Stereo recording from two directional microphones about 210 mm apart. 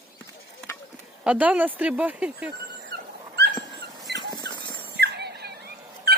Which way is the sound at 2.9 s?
50° right (ahead or behind).